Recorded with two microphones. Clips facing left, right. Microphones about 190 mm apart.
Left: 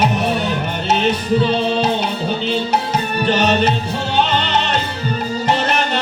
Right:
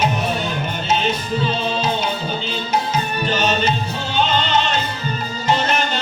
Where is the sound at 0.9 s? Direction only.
65° left (ahead or behind).